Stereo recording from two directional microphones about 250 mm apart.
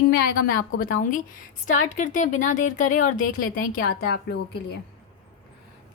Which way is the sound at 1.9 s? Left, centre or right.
Left.